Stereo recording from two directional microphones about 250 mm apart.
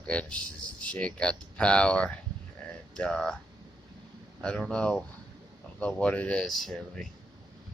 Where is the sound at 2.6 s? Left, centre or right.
Centre.